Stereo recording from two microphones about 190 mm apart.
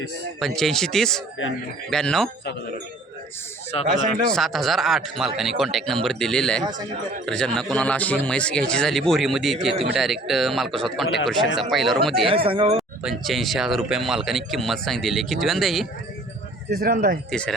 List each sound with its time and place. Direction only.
0.3 s speech: centre (ahead or behind)
3.7 s speech: 30° left (ahead or behind)
4.3 s speech: centre (ahead or behind)
12.5 s speech: 30° right (ahead or behind)
13.0 s speech: centre (ahead or behind)
16.6 s speech: 55° right (ahead or behind)